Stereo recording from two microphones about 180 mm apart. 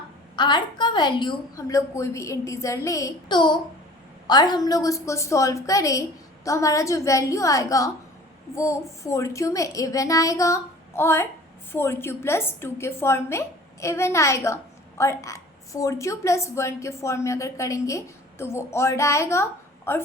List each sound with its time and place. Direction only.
0.3 s a woman's voice: 25° left (ahead or behind)